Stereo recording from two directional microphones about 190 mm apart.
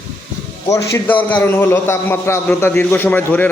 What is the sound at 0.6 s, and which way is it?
A man's voice, 15° left (ahead or behind).